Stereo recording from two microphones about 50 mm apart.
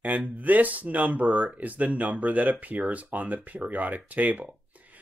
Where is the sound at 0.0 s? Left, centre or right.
Right.